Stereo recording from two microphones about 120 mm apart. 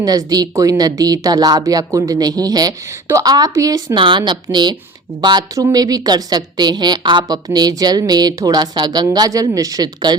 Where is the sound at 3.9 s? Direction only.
40° right (ahead or behind).